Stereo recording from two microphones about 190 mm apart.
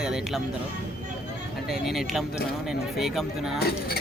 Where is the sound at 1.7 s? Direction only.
Centre (ahead or behind).